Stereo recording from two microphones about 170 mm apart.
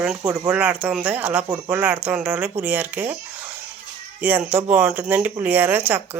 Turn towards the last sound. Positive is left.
turn(degrees=-10)  # may be behind; listen again after turning